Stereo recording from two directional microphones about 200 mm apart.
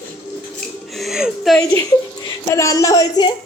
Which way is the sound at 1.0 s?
Centre (ahead or behind).